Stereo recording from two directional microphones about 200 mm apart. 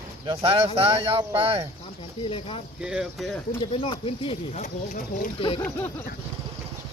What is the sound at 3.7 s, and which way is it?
Speech, 30° left (ahead or behind).